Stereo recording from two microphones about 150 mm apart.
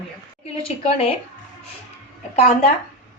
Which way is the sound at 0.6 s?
40° left (ahead or behind).